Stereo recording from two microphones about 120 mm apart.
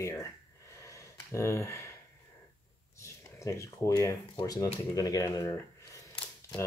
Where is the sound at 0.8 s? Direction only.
25° left (ahead or behind).